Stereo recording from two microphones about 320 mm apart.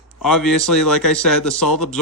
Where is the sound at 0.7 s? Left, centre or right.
Centre.